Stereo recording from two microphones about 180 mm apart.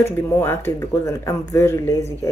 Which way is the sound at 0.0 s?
15° left (ahead or behind).